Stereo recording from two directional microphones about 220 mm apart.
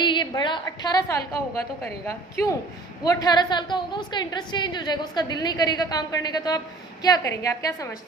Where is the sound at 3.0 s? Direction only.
20° left (ahead or behind).